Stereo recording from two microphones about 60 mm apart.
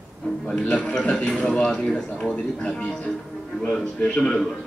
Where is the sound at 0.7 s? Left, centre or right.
Left.